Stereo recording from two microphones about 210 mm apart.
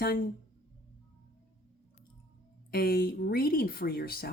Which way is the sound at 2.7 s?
45° left (ahead or behind).